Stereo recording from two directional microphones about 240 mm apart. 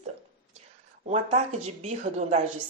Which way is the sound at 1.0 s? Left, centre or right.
Right.